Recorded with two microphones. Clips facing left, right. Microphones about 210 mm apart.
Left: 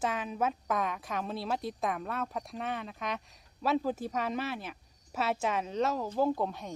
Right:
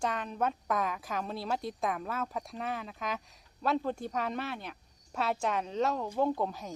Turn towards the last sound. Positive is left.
turn(degrees=0)  # may be behind; listen again after turning